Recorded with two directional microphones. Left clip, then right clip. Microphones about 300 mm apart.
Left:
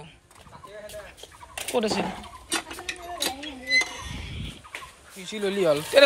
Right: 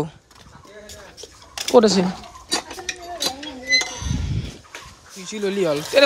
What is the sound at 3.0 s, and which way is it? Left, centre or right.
Cutlery, centre.